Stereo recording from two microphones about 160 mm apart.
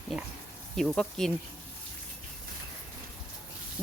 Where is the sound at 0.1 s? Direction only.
Centre (ahead or behind).